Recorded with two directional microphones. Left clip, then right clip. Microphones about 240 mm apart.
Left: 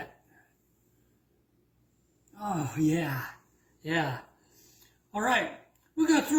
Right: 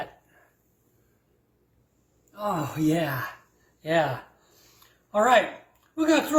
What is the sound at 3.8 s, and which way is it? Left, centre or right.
Speech, centre.